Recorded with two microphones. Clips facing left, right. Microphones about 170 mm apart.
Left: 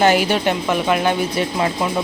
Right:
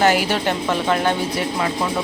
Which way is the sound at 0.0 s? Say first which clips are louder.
Left 2 dB; 20° left (ahead or behind).